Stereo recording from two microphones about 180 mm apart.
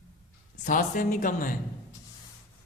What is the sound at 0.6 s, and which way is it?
Speech, 50° left (ahead or behind).